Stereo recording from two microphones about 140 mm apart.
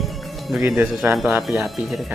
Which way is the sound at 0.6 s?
15° right (ahead or behind).